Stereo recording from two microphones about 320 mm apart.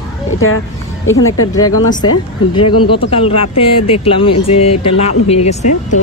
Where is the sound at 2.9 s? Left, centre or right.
Centre.